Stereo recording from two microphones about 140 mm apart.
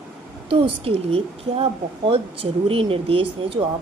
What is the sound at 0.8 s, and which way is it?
A woman's voice, 45° right (ahead or behind).